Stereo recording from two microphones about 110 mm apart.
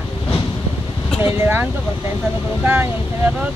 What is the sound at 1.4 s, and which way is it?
Speech, 20° right (ahead or behind).